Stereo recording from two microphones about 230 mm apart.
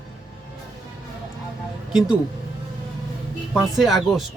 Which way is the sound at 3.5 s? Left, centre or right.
Centre.